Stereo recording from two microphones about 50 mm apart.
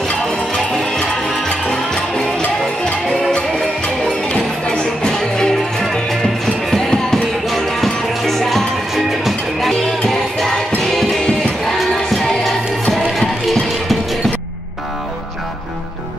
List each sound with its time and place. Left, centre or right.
1.7 s music: centre
6.7 s music: centre
10.0 s music: centre
12.1 s music: centre